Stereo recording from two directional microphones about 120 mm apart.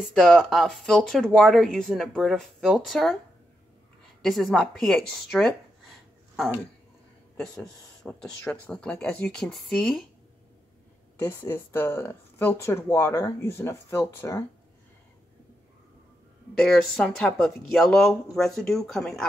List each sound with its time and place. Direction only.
0.1 s speech: 5° left (ahead or behind)
4.2 s speech: centre (ahead or behind)
7.3 s speech: 5° left (ahead or behind)
11.1 s speech: 20° left (ahead or behind)
16.5 s speech: 5° left (ahead or behind)